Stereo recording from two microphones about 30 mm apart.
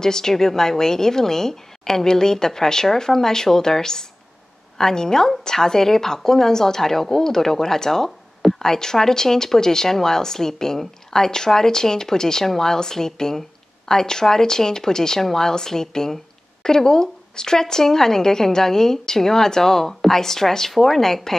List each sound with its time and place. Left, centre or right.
0.0 s a woman's voice: centre